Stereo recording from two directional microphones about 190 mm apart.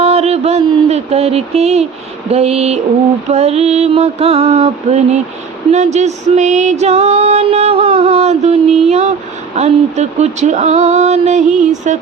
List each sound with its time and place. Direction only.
0.0 s mantra: 35° right (ahead or behind)
2.3 s music: 35° right (ahead or behind)